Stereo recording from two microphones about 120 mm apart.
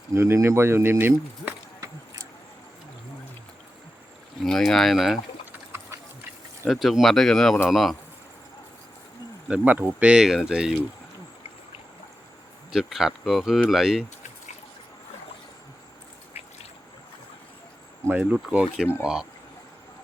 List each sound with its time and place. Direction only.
0.1 s speech: 25° right (ahead or behind)
4.4 s speech: 5° left (ahead or behind)
6.7 s speech: centre (ahead or behind)
9.5 s speech: 15° right (ahead or behind)
12.7 s speech: 5° right (ahead or behind)
18.2 s speech: 10° right (ahead or behind)